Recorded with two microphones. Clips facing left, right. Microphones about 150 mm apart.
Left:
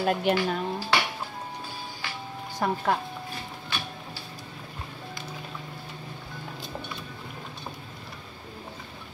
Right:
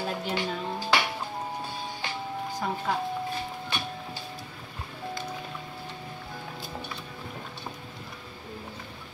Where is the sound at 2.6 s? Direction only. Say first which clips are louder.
Left 6 dB; 60° left (ahead or behind).